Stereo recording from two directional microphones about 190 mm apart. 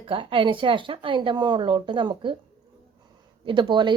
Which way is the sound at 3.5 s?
25° right (ahead or behind).